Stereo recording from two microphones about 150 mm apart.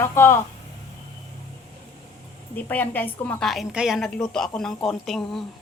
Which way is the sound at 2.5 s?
10° left (ahead or behind).